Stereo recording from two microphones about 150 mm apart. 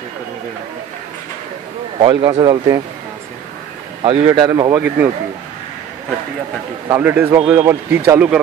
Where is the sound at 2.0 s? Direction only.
35° right (ahead or behind).